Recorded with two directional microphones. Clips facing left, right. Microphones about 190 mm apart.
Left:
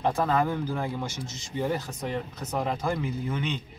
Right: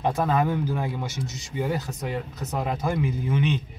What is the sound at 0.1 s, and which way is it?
Speech, 10° right (ahead or behind).